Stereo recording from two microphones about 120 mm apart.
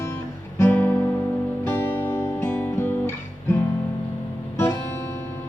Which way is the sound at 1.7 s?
20° left (ahead or behind).